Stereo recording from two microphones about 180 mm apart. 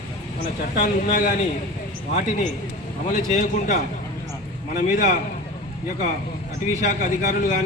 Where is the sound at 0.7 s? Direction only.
45° left (ahead or behind).